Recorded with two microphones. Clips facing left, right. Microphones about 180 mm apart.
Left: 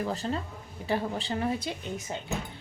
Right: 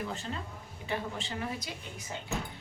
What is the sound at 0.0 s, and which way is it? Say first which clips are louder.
A woman's voice: left 6 dB; 40° left (ahead or behind).